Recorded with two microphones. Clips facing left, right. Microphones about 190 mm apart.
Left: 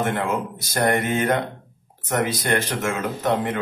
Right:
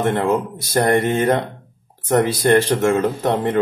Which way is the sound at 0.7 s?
35° right (ahead or behind).